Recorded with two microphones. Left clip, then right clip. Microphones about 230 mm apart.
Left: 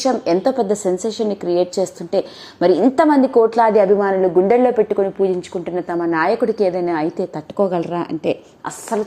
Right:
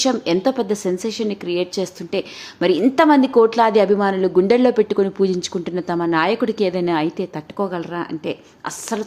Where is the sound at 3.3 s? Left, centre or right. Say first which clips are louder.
Left 1 dB; centre.